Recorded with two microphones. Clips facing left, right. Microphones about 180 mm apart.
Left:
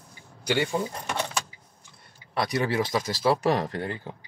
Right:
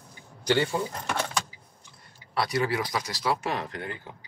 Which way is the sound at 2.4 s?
20° left (ahead or behind).